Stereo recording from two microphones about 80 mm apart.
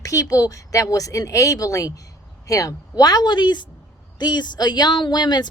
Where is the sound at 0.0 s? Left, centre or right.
Left.